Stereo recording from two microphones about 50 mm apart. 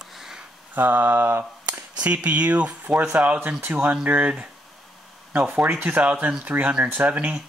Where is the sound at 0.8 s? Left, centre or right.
Right.